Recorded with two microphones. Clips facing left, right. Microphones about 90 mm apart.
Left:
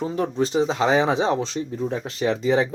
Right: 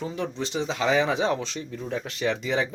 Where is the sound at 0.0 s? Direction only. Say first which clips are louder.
Left 7 dB; 40° left (ahead or behind).